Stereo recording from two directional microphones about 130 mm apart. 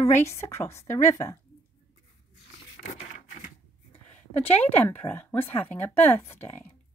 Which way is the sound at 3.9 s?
15° left (ahead or behind).